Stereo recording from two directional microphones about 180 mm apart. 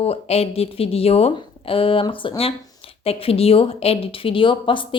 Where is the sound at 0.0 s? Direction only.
35° left (ahead or behind).